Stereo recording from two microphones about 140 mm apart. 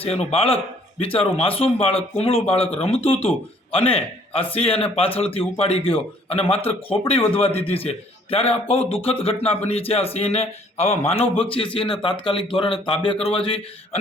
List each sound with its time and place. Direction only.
0.0 s a man's voice: 45° left (ahead or behind)